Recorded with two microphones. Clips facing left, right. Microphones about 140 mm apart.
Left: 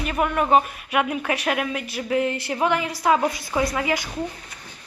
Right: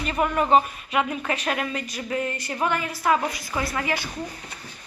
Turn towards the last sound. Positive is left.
turn(degrees=15)  # may be behind; listen again after turning